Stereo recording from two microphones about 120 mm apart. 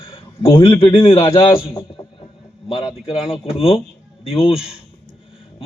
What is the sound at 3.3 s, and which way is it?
A man's voice, 50° left (ahead or behind).